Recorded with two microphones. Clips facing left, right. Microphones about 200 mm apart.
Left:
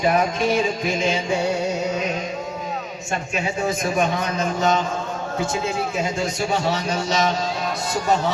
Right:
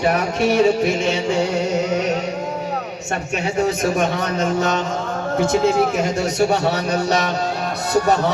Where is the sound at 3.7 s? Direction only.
70° right (ahead or behind).